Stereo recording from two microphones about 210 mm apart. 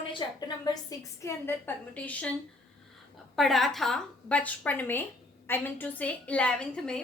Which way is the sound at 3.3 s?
Centre (ahead or behind).